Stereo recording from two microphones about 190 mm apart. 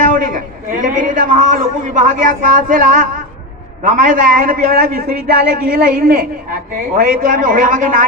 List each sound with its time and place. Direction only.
0.1 s a man's voice: 45° right (ahead or behind)